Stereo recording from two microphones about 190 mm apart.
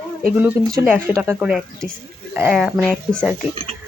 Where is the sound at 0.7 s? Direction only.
15° right (ahead or behind); by 3.2 s centre (ahead or behind).